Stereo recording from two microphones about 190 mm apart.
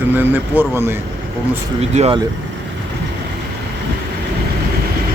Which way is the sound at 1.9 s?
30° right (ahead or behind).